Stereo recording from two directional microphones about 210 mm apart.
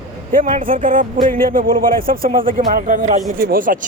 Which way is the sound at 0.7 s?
40° right (ahead or behind).